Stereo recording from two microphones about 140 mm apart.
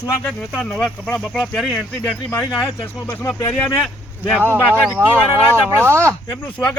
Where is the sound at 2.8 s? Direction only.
15° left (ahead or behind).